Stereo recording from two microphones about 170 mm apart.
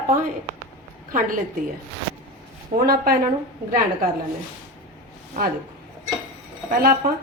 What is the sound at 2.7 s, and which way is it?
Speech, 60° right (ahead or behind).